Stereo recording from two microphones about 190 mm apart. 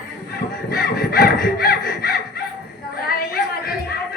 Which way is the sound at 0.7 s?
55° left (ahead or behind).